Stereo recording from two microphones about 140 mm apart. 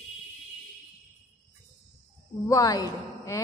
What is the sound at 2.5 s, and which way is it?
Speech, 25° left (ahead or behind).